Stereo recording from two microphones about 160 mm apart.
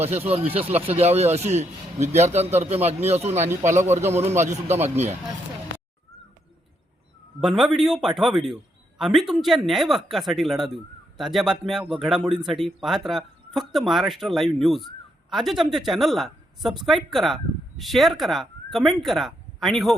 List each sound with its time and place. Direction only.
0.3 s speech: 40° right (ahead or behind)
7.4 s speech: centre (ahead or behind)